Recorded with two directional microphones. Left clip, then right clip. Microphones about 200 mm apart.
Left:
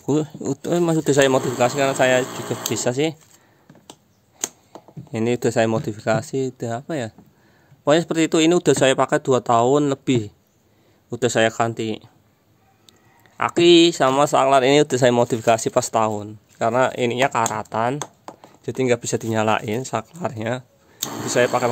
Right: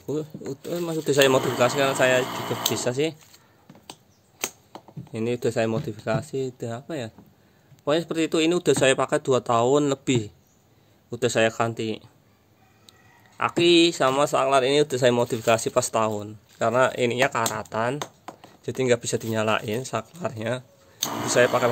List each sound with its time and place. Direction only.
0.0 s speech: 40° left (ahead or behind)
1.1 s speech: 20° left (ahead or behind)
5.1 s speech: 30° left (ahead or behind)
13.4 s speech: 25° left (ahead or behind)
17.9 s a sound: 5° left (ahead or behind)
18.7 s speech: 20° left (ahead or behind)